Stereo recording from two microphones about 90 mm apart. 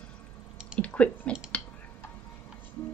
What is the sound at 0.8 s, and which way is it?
Speech, 15° left (ahead or behind).